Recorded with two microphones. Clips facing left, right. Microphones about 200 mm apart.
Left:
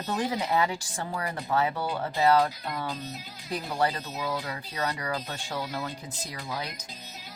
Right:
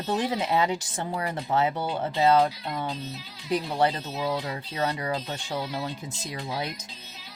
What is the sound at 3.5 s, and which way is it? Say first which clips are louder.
Speech: right 4 dB; 20° right (ahead or behind).